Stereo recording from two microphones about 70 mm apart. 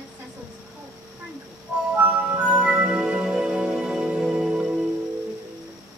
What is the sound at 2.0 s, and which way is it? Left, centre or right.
Music, centre.